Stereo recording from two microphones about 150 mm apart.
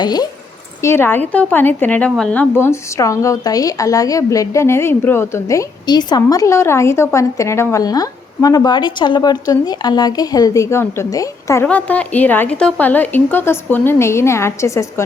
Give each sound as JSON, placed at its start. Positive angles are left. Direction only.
{"t": 0.0, "sound": "speech", "side_deg": 25}
{"t": 0.8, "sound": "speech", "side_deg": 15}